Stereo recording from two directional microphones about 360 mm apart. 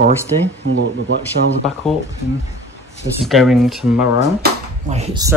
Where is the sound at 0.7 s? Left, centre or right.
Right.